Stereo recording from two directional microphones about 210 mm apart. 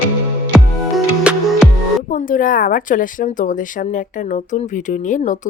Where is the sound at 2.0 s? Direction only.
40° left (ahead or behind).